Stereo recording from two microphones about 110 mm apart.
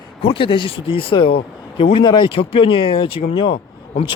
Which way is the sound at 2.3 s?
55° left (ahead or behind).